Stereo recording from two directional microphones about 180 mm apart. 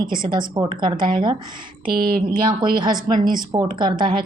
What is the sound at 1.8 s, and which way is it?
Speech, 55° right (ahead or behind).